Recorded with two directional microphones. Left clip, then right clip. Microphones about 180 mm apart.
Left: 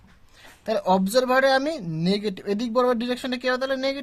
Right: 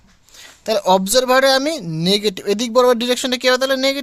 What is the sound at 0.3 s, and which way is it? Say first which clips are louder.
Speech: right 7 dB; 25° right (ahead or behind).